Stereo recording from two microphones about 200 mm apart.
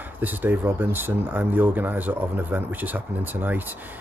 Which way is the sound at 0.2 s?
10° right (ahead or behind).